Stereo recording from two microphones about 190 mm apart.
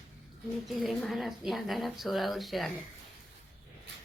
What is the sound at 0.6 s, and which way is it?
Speech, centre (ahead or behind).